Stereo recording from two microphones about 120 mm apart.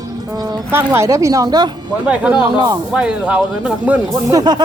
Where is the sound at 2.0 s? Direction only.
10° right (ahead or behind).